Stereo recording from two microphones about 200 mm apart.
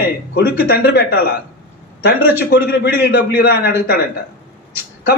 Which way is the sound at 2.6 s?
55° left (ahead or behind).